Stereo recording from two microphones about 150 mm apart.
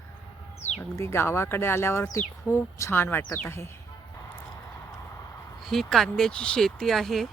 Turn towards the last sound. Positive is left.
turn(degrees=0)  # may be behind; listen again after turning